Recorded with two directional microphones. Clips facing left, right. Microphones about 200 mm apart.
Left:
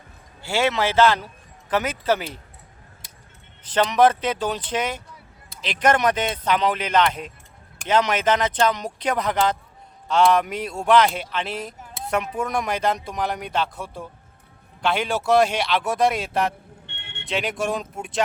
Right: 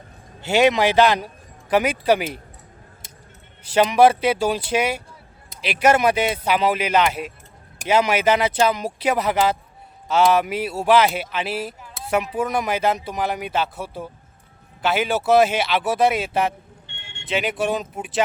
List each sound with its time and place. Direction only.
0.4 s speech: 15° right (ahead or behind)
3.6 s speech: 10° right (ahead or behind)
16.8 s a sound: 60° left (ahead or behind)
17.2 s speech: centre (ahead or behind)